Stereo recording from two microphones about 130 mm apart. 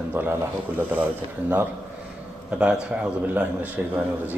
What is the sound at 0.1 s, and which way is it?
Speech, 15° right (ahead or behind).